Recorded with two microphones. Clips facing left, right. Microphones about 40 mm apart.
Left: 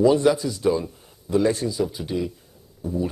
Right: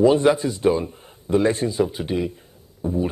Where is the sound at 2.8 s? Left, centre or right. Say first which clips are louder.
Right 3 dB; right.